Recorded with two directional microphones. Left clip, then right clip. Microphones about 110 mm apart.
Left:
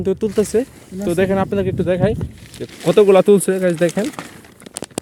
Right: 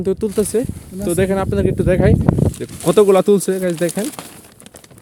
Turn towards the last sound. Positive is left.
turn(degrees=0)  # may be behind; listen again after turning